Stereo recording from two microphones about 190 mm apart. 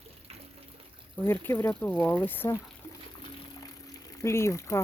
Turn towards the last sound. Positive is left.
turn(degrees=15)  # may be behind; listen again after turning